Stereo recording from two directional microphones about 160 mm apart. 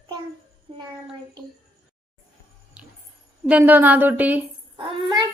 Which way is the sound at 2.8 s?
5° right (ahead or behind).